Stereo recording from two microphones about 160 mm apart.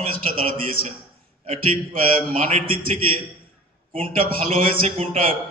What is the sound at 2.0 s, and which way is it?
A man's voice, 35° right (ahead or behind).